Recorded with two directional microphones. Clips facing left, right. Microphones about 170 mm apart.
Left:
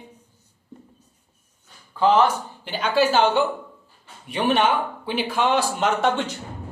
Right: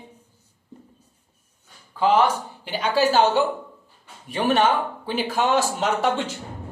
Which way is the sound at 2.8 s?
40° right (ahead or behind).